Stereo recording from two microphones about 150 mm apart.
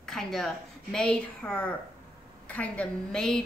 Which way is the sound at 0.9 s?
5° left (ahead or behind).